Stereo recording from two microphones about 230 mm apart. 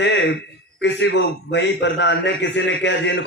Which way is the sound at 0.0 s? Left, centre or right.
Left.